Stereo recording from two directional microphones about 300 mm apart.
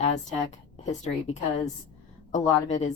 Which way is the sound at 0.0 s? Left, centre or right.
Left.